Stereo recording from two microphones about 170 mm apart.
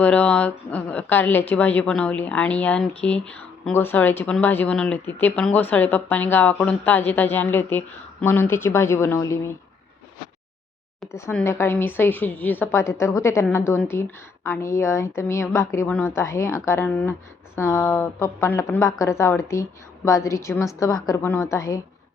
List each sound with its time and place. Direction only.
0.0 s a woman's voice: 5° left (ahead or behind)
11.0 s a sound: centre (ahead or behind)
11.4 s a woman's voice: 15° left (ahead or behind)